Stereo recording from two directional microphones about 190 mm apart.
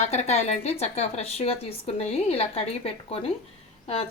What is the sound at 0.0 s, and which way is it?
A woman's voice, 35° left (ahead or behind).